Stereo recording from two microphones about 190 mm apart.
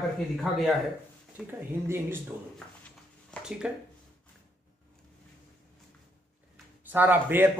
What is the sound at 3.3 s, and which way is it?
Speech, 5° right (ahead or behind).